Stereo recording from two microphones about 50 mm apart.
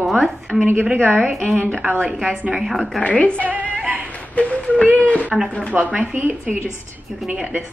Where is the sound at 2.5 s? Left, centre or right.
Centre.